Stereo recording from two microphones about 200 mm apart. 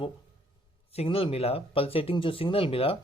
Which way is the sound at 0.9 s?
25° left (ahead or behind).